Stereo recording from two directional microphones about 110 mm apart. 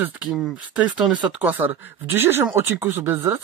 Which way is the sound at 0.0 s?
15° right (ahead or behind).